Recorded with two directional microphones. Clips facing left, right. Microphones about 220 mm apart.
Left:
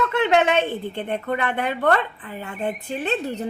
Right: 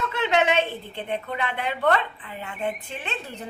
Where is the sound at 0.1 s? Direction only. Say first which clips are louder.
Even; 55° left (ahead or behind).